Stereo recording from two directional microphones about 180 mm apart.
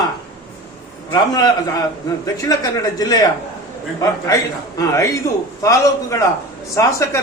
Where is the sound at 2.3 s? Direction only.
20° left (ahead or behind).